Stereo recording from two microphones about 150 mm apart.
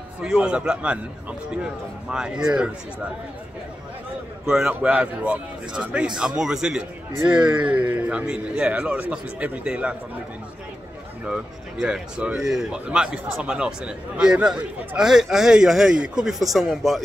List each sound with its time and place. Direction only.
0.2 s speech: 5° right (ahead or behind)
2.0 s a man's voice: 5° right (ahead or behind)
4.5 s a man's voice: 5° right (ahead or behind)
7.3 s speech: 30° right (ahead or behind)
7.6 s speech: 10° right (ahead or behind)
11.8 s a man's voice: 5° right (ahead or behind)